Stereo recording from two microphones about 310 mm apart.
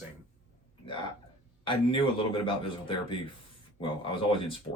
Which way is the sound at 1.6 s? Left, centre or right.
Centre.